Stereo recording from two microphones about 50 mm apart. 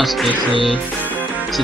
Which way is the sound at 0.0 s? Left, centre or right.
Centre.